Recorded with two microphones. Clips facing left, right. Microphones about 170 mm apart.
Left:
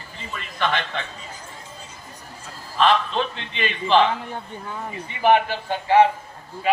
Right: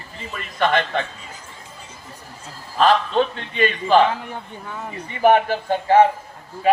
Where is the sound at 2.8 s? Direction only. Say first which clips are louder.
Right 3 dB; 40° right (ahead or behind).